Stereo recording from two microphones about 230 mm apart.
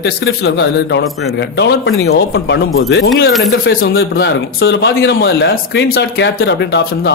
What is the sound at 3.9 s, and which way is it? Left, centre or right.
A man's voice, left.